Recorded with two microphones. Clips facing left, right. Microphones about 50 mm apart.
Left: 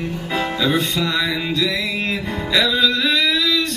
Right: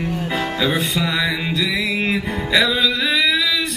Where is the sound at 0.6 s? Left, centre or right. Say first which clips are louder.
Left 1 dB; centre.